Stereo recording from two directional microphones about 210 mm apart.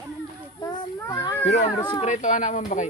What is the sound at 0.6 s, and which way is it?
Children playing, 20° left (ahead or behind).